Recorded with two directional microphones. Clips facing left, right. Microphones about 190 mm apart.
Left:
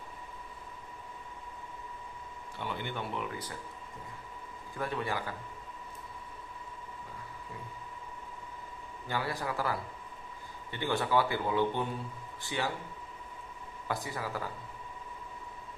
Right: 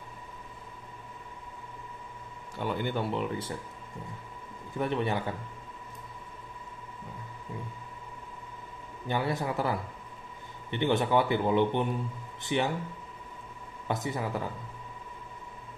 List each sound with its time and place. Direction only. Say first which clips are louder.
2.6 s speech: right 7 dB; 40° right (ahead or behind)
4.7 s a man's voice: right 5 dB; 20° right (ahead or behind)
9.0 s a man's voice: right 5 dB; 20° right (ahead or behind)
13.8 s a man's voice: right 4 dB; 20° right (ahead or behind)